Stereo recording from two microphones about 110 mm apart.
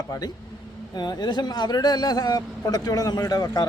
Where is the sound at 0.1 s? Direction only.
35° left (ahead or behind).